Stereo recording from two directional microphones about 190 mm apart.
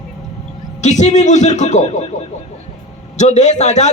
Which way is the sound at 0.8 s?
40° left (ahead or behind).